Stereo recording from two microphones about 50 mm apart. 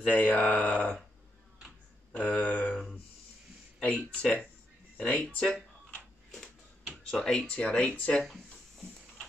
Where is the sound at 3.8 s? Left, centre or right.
Centre.